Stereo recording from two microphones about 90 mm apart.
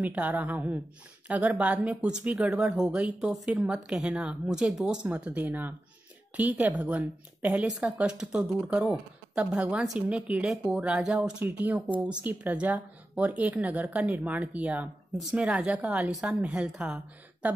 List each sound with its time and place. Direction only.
0.0 s speech: 15° right (ahead or behind)
3.2 s speech: centre (ahead or behind)
3.5 s speech: 10° right (ahead or behind)